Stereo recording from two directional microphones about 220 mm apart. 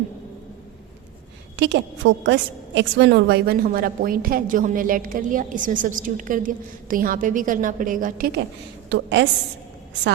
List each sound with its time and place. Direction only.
1.5 s a woman's voice: 55° right (ahead or behind)
8.9 s a woman's voice: 55° right (ahead or behind)